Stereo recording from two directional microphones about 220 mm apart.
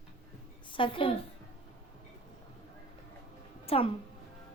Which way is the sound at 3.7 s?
25° left (ahead or behind).